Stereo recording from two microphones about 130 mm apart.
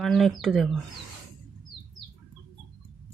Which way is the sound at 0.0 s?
Centre (ahead or behind).